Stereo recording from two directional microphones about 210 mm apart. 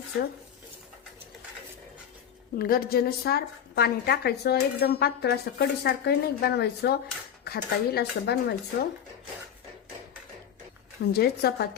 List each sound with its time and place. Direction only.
2.6 s a woman's voice: 45° left (ahead or behind)
11.0 s a woman's voice: 50° left (ahead or behind)